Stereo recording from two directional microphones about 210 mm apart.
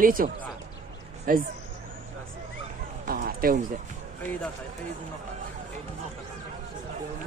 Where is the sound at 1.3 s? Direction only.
40° right (ahead or behind).